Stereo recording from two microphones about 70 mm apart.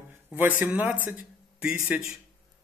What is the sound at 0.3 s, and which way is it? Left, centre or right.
A man's voice, right.